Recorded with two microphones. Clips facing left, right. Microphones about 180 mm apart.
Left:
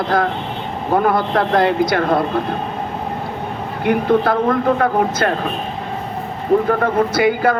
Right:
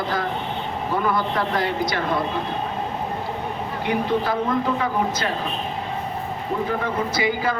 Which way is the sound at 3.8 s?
55° left (ahead or behind).